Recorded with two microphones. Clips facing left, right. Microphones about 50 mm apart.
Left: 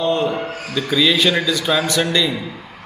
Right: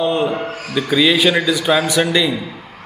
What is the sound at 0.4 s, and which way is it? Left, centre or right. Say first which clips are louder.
Speech: right 1 dB; right.